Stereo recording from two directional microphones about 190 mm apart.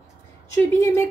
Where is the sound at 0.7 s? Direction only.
15° left (ahead or behind).